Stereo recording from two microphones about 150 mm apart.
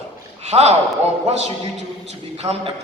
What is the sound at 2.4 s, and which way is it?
Speech, 45° right (ahead or behind).